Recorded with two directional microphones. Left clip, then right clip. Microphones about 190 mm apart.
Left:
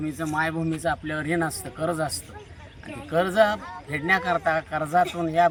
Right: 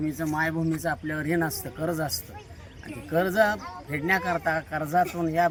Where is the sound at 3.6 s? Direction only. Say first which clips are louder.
Left 1 dB; 45° left (ahead or behind).